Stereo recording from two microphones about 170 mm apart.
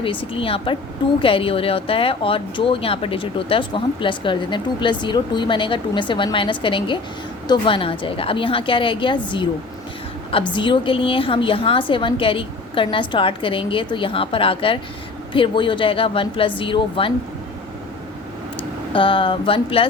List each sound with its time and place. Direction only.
0.0 s a woman's voice: 30° left (ahead or behind)
18.9 s a woman's voice: 30° left (ahead or behind)